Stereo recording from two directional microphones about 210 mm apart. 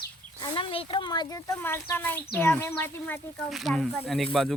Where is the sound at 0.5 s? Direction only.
25° left (ahead or behind).